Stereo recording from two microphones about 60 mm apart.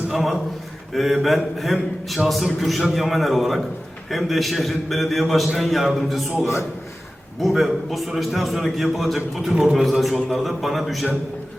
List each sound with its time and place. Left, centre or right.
0.1 s a man's voice: centre
6.4 s a man's voice: left
7.4 s a man's voice: centre
9.6 s a man's voice: centre
9.8 s a man's voice: centre